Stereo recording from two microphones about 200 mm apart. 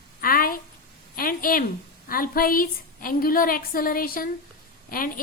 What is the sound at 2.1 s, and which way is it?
A woman's voice, 45° left (ahead or behind).